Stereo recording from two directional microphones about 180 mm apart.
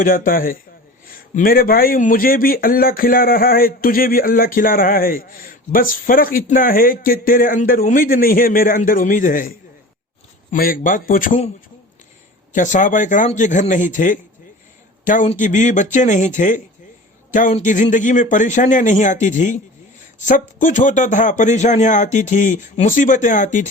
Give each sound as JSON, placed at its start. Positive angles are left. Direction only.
{"t": 0.0, "sound": "a man's voice", "side_deg": 50}
{"t": 10.5, "sound": "a man's voice", "side_deg": 50}
{"t": 12.5, "sound": "a man's voice", "side_deg": 45}